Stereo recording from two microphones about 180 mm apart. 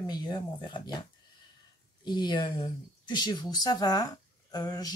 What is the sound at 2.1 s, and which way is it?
Speech, 25° left (ahead or behind).